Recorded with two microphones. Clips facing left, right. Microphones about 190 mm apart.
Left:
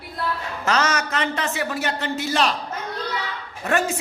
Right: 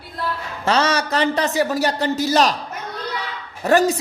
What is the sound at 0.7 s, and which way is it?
A man's voice, 30° right (ahead or behind).